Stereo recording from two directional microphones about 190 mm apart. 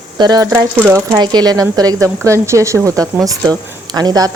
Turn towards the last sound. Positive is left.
turn(degrees=-20)  # may be behind; listen again after turning